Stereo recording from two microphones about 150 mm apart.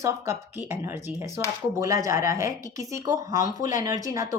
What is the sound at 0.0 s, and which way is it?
A woman's voice, 15° right (ahead or behind).